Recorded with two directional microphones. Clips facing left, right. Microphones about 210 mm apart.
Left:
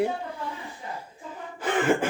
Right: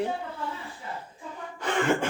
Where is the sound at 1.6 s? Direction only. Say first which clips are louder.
Left 2 dB; 5° left (ahead or behind).